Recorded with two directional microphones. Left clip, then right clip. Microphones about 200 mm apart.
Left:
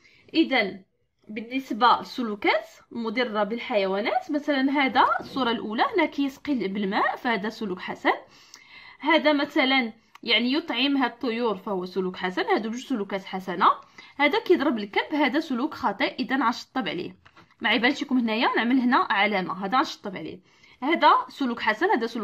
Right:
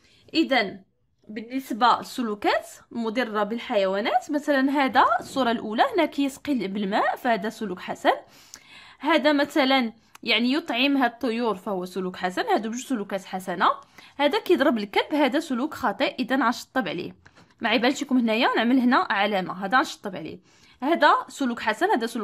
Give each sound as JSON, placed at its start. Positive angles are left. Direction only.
{"t": 0.3, "sound": "a woman's voice", "side_deg": -30}
{"t": 1.7, "sound": "a woman's voice", "side_deg": -35}